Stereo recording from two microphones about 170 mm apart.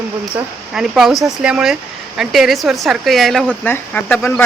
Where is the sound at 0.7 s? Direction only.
5° right (ahead or behind).